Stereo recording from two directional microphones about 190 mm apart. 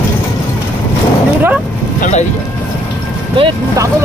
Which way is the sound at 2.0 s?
40° left (ahead or behind).